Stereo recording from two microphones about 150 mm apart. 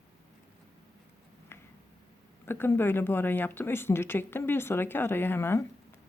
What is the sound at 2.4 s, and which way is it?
Speech, 15° left (ahead or behind).